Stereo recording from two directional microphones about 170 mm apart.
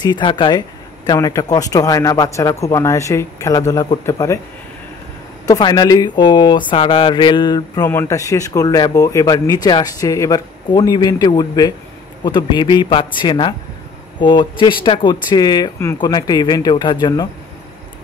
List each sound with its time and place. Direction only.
0.0 s speech: 25° left (ahead or behind)
5.5 s speech: 25° left (ahead or behind)